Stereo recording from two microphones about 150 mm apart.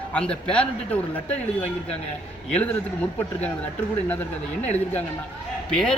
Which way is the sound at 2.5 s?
10° left (ahead or behind).